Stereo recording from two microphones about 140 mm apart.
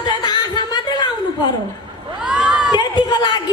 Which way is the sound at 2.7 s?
30° left (ahead or behind).